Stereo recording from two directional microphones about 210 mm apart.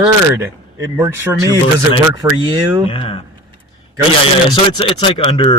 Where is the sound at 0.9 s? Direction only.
10° right (ahead or behind).